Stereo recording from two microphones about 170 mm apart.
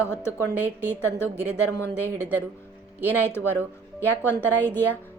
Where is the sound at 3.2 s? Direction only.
15° left (ahead or behind).